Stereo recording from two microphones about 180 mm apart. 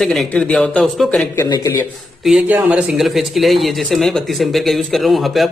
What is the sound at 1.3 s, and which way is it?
Speech, 15° left (ahead or behind).